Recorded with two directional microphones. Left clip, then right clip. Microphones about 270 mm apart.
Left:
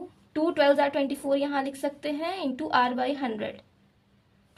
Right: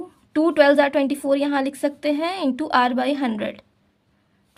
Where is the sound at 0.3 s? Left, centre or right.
Right.